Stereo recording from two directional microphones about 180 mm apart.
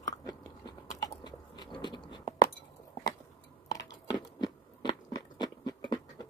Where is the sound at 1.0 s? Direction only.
25° left (ahead or behind).